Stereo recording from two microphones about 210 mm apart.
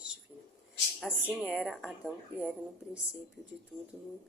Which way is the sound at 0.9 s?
5° right (ahead or behind).